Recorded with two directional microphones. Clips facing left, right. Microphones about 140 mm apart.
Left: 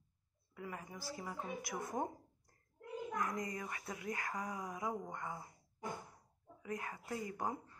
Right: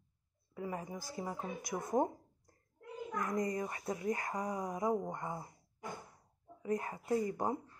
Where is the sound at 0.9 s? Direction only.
45° right (ahead or behind).